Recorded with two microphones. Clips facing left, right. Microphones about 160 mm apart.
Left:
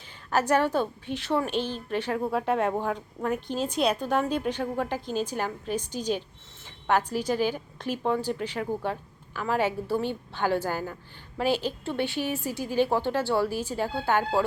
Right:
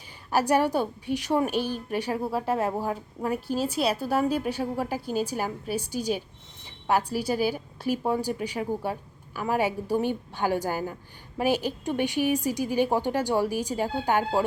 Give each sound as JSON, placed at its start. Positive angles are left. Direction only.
{"t": 0.3, "sound": "a woman's voice", "side_deg": -10}